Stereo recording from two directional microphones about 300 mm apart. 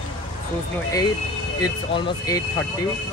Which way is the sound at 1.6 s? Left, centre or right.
Centre.